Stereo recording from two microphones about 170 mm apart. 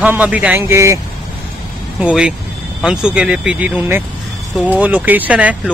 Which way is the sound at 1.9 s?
5° right (ahead or behind).